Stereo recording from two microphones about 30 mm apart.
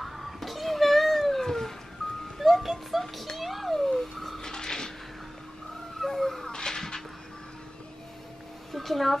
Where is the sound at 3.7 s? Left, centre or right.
Centre.